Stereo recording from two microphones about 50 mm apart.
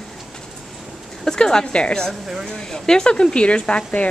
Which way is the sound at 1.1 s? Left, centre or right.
Centre.